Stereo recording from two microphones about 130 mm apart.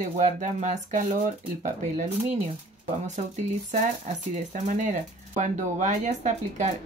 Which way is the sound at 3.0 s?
65° right (ahead or behind).